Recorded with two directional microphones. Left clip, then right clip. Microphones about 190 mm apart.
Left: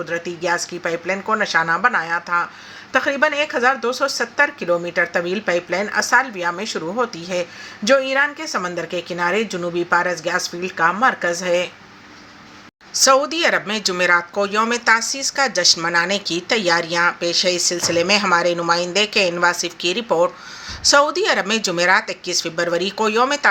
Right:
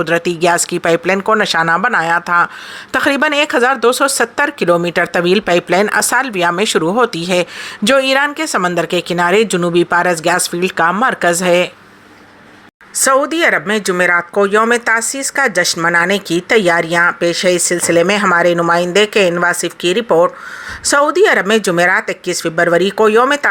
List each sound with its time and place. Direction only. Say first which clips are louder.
0.0 s speech: right 10 dB; 60° right (ahead or behind)
13.1 s speech: right 4 dB; 45° right (ahead or behind)